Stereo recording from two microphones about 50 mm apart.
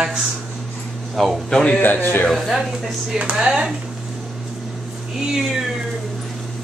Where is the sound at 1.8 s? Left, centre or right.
Left.